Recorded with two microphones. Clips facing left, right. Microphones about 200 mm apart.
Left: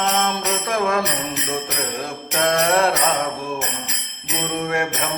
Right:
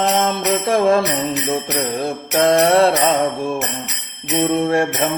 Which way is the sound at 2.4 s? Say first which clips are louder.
Right 5 dB; 30° right (ahead or behind).